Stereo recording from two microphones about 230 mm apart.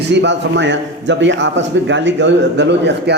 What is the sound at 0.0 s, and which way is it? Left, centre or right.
A man's voice, right.